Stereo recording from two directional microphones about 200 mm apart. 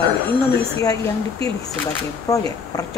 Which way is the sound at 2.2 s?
15° left (ahead or behind).